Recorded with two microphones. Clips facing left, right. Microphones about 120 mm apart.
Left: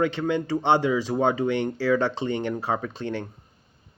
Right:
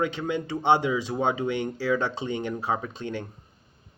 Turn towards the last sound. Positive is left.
turn(degrees=-15)  # may be behind; listen again after turning